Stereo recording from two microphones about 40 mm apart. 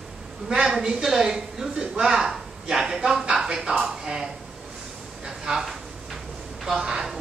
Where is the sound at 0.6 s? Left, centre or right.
Centre.